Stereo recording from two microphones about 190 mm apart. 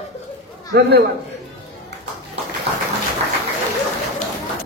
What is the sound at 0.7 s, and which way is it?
Speech, 60° right (ahead or behind).